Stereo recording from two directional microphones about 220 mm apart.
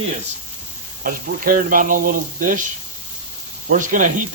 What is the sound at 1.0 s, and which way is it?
Speech, 40° right (ahead or behind).